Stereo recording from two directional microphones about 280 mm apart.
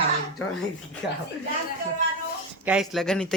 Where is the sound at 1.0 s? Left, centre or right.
Centre.